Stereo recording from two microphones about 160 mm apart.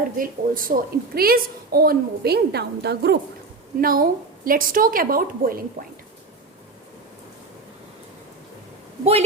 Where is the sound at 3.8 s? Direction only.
65° right (ahead or behind).